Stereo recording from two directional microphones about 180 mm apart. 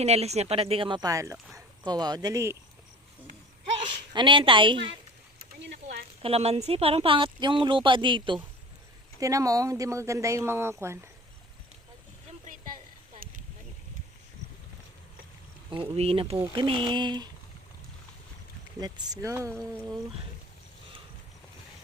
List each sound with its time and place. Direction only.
0.0 s speech: 35° right (ahead or behind); by 2.6 s 15° right (ahead or behind)
3.8 s speech: 25° right (ahead or behind)
5.6 s a sound: 65° right (ahead or behind)
6.2 s speech: 35° right (ahead or behind); by 11.0 s 15° right (ahead or behind)
15.7 s speech: 30° right (ahead or behind)
18.8 s speech: 20° right (ahead or behind)